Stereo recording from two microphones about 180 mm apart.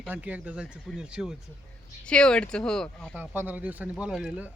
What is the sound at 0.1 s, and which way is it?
Speech, 10° right (ahead or behind).